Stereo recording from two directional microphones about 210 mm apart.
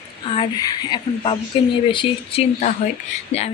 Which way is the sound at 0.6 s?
20° left (ahead or behind).